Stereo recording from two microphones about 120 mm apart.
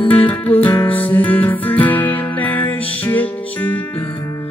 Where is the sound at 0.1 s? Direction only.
15° left (ahead or behind).